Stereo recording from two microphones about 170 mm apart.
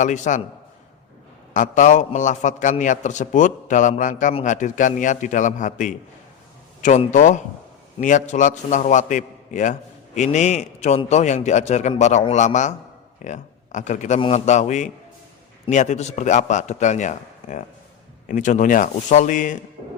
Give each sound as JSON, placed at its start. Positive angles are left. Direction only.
{"t": 0.0, "sound": "a man's voice", "side_deg": 45}
{"t": 1.5, "sound": "a man's voice", "side_deg": 50}